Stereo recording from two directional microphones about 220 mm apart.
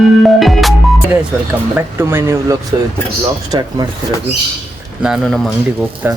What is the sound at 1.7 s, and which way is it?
Speech, 10° right (ahead or behind).